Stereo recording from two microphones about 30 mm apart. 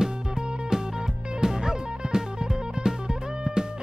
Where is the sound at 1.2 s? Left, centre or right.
Right.